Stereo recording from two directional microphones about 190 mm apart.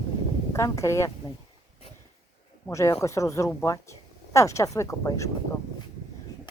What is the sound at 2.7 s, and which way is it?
Speech, 15° left (ahead or behind).